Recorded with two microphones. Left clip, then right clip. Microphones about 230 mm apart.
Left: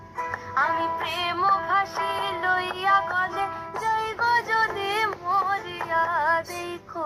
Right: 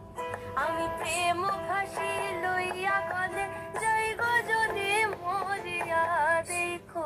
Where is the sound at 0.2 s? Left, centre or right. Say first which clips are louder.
Left 7 dB; left.